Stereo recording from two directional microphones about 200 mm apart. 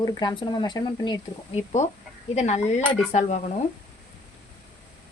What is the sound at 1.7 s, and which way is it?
Speech, 35° left (ahead or behind).